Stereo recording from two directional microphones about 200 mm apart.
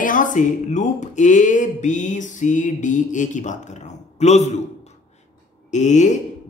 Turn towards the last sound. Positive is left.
turn(degrees=35)  # may be behind; listen again after turning